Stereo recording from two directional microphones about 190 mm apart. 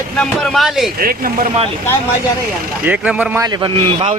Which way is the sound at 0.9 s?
50° right (ahead or behind).